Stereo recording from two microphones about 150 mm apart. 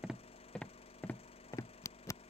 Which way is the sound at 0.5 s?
5° left (ahead or behind).